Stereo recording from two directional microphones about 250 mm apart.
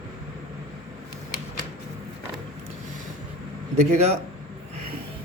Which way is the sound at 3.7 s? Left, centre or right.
Right.